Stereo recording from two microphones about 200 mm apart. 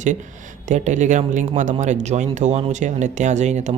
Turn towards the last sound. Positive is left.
turn(degrees=-35)  # may be behind; listen again after turning